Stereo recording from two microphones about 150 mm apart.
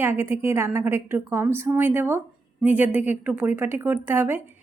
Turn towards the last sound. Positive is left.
turn(degrees=-15)  # may be behind; listen again after turning